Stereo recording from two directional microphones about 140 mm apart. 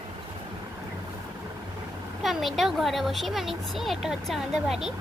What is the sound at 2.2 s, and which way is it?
Speech, centre (ahead or behind).